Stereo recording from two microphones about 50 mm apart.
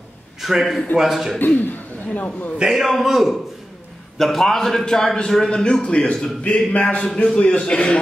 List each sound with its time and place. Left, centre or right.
0.4 s a man's voice: centre
1.6 s a man's voice: left
2.6 s a man's voice: centre
6.4 s a man's voice: left